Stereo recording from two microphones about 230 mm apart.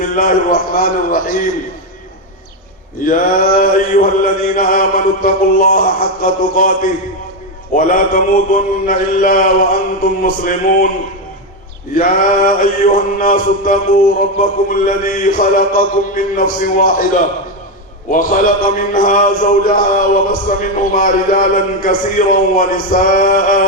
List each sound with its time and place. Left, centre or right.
0.0 s mantra: left
3.1 s mantra: left
11.9 s mantra: left
18.1 s mantra: left